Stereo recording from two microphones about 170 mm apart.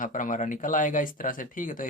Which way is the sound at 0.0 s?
50° left (ahead or behind).